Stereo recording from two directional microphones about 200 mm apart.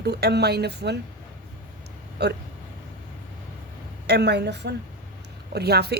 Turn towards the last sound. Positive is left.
turn(degrees=-55)  # may be behind; listen again after turning